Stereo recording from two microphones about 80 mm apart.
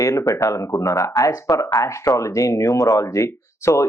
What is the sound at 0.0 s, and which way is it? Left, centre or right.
Speech, left.